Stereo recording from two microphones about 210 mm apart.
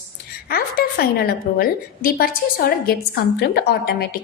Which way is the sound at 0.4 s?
45° left (ahead or behind).